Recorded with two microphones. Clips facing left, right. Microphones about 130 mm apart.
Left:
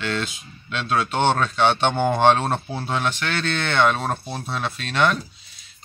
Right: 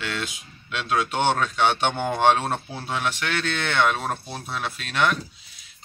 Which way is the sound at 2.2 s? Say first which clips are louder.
Left 1 dB; 10° right (ahead or behind).